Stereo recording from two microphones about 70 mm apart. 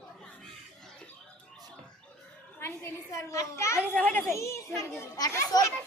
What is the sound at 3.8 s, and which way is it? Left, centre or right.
Speech, left.